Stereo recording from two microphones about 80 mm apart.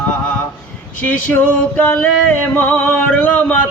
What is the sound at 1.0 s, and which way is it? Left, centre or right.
Music, left.